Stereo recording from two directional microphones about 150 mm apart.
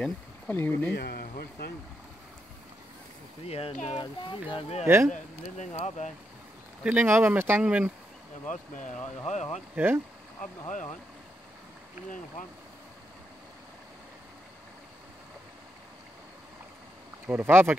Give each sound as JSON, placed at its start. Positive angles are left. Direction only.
{"t": 0.0, "sound": "speech", "side_deg": 10}
{"t": 0.9, "sound": "speech", "side_deg": 90}
{"t": 3.4, "sound": "speech", "side_deg": 40}
{"t": 4.8, "sound": "speech", "side_deg": -15}
{"t": 5.1, "sound": "speech", "side_deg": 50}
{"t": 6.8, "sound": "speech", "side_deg": -10}
{"t": 8.5, "sound": "speech", "side_deg": 60}
{"t": 10.7, "sound": "speech", "side_deg": 55}
{"t": 17.3, "sound": "speech", "side_deg": -15}